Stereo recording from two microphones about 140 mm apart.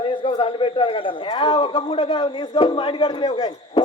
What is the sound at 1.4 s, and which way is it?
Music, 40° left (ahead or behind).